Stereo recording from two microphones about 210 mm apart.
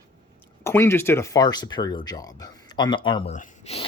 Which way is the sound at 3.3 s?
35° left (ahead or behind).